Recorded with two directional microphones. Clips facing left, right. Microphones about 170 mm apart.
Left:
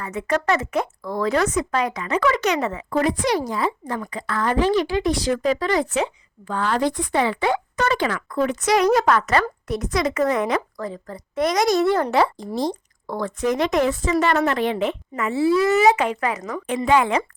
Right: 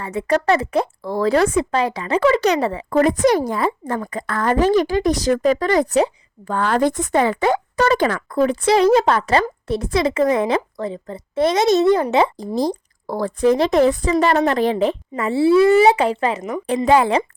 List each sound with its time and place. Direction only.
0.0 s speech: 30° right (ahead or behind)
2.9 s a woman's voice: 45° right (ahead or behind)
6.5 s a woman's voice: 50° right (ahead or behind); by 12.0 s 20° right (ahead or behind)
12.5 s speech: 35° right (ahead or behind)